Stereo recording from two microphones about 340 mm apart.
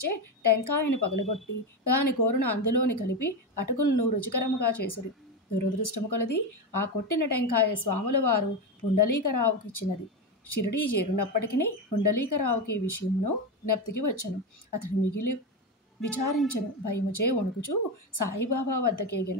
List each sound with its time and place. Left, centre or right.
0.0 s a woman's voice: left
16.4 s a woman's voice: left